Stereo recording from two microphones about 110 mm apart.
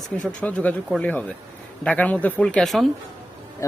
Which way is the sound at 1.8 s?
10° left (ahead or behind).